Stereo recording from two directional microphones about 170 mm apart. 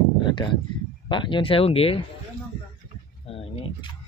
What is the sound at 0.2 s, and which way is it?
Speech, 25° left (ahead or behind).